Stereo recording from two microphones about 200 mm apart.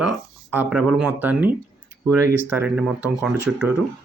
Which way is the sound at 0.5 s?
5° right (ahead or behind).